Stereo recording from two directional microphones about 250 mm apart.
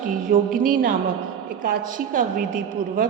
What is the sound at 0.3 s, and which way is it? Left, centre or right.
Speech, right.